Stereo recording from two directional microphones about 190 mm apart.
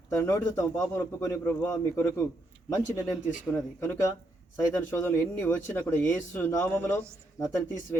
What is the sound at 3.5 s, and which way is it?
Speech, 15° left (ahead or behind).